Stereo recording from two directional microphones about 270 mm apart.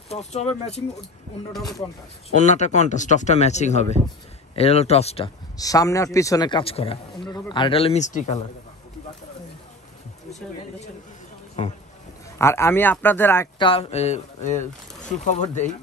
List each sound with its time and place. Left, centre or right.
0.1 s speech: left
2.3 s speech: left
12.4 s speech: centre; by 15.7 s left